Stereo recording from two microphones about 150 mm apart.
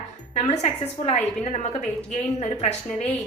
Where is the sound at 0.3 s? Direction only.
50° left (ahead or behind).